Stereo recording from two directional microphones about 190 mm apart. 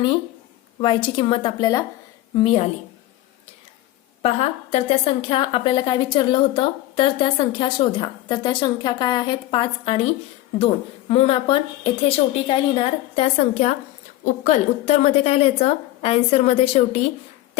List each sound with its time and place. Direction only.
0.8 s a woman's voice: 30° left (ahead or behind)
4.2 s a woman's voice: 35° left (ahead or behind)
11.1 s a woman's voice: 30° left (ahead or behind)